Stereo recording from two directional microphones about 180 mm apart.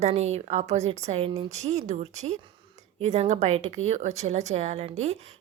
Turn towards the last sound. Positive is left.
turn(degrees=-40)  # may be behind; listen again after turning